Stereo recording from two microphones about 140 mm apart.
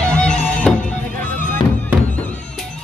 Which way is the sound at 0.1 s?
5° left (ahead or behind).